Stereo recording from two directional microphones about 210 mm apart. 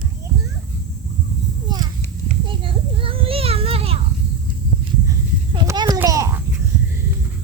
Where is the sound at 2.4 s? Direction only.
25° right (ahead or behind).